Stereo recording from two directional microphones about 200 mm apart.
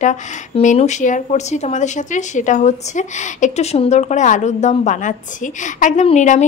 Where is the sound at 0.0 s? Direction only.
40° left (ahead or behind).